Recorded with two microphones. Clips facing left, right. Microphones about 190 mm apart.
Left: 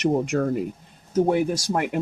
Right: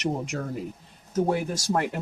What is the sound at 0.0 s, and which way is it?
Speech, 60° left (ahead or behind).